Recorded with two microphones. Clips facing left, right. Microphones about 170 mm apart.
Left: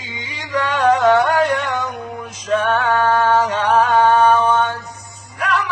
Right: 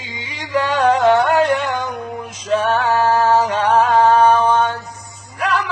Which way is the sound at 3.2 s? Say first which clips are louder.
Right 1 dB; 30° right (ahead or behind).